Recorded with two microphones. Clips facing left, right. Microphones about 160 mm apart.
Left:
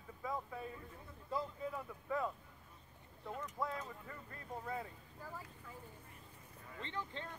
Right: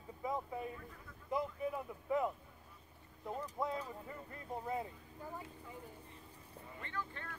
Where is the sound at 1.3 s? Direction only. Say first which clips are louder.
Right 3 dB; 20° right (ahead or behind).